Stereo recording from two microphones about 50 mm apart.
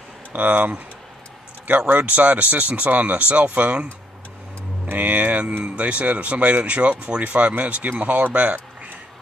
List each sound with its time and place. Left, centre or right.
0.3 s speech: right